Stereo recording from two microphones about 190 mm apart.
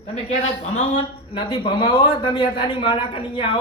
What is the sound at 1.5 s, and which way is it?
Speech, 25° left (ahead or behind).